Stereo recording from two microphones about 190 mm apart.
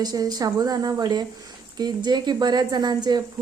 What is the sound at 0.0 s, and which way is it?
A woman's voice, 20° right (ahead or behind).